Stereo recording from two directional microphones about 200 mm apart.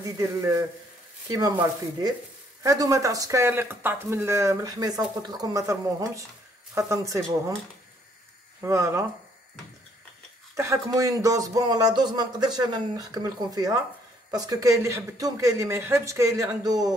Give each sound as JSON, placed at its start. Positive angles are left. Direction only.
{"t": 0.0, "sound": "speech", "side_deg": -15}
{"t": 2.6, "sound": "speech", "side_deg": -15}
{"t": 8.5, "sound": "speech", "side_deg": -15}
{"t": 10.5, "sound": "speech", "side_deg": -15}